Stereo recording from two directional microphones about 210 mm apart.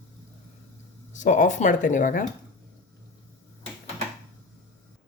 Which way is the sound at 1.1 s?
35° left (ahead or behind).